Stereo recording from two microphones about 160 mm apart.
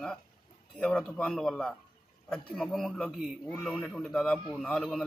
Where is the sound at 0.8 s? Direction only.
5° left (ahead or behind).